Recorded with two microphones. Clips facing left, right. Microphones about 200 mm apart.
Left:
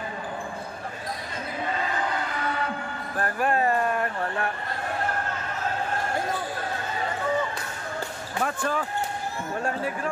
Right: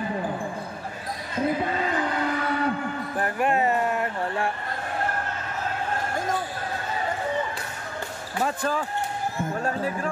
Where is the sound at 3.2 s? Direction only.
20° right (ahead or behind).